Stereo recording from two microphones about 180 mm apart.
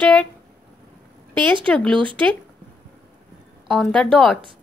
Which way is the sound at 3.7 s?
Centre (ahead or behind).